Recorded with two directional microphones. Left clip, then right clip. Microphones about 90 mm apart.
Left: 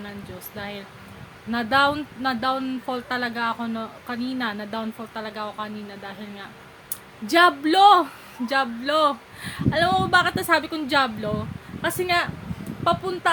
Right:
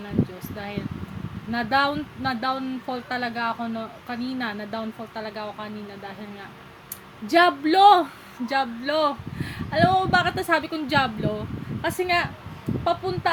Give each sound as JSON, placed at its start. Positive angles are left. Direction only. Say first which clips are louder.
{"t": 0.5, "sound": "speech", "louder": "right 1 dB", "side_deg": 35}
{"t": 7.3, "sound": "speech", "louder": "left 1 dB", "side_deg": 40}